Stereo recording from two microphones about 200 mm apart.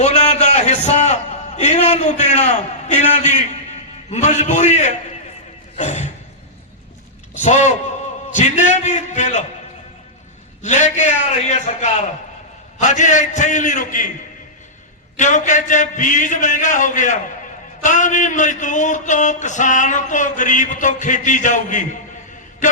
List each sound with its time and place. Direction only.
0.0 s a sound: 35° left (ahead or behind)
5.7 s speech: 35° left (ahead or behind)
7.4 s speech: 35° left (ahead or behind)
10.6 s speech: 35° left (ahead or behind)
15.1 s speech: 35° left (ahead or behind)
22.6 s a sound: 40° left (ahead or behind)